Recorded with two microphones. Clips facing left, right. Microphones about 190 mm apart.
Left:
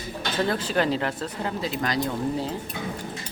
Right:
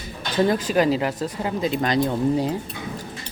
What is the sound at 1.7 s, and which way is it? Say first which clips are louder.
Speech: right 7 dB; 25° right (ahead or behind).